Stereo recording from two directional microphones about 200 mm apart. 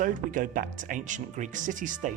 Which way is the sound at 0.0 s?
40° right (ahead or behind).